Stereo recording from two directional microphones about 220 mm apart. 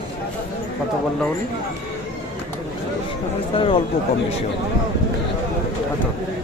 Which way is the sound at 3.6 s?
25° left (ahead or behind).